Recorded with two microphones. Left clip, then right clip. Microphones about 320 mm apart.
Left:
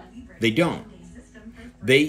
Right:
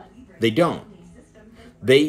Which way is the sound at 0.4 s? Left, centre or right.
Centre.